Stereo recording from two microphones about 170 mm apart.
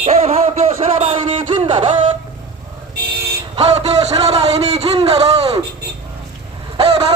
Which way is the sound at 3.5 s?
40° right (ahead or behind).